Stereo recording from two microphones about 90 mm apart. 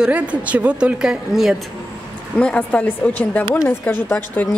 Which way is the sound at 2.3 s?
15° left (ahead or behind).